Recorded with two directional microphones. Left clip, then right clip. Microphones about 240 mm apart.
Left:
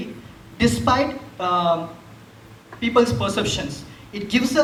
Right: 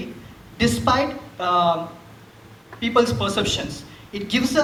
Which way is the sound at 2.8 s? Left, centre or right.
Right.